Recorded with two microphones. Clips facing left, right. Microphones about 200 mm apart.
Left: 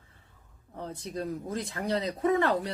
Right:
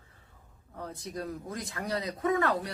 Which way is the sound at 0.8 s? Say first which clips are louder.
Left 3 dB; 25° left (ahead or behind).